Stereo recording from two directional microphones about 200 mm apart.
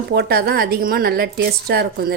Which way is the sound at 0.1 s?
55° right (ahead or behind).